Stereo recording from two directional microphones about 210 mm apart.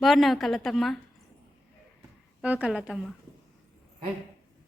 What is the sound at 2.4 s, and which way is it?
Speech, 5° right (ahead or behind).